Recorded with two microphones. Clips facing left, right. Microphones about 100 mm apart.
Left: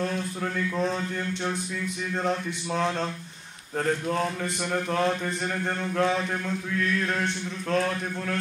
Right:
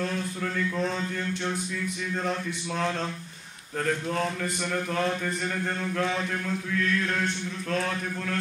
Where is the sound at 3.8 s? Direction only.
25° left (ahead or behind).